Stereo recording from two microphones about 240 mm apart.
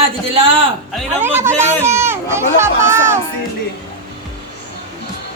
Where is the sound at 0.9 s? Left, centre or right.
Centre.